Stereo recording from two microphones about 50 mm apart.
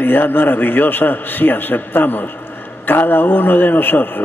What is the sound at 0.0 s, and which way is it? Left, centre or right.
A man's voice, left.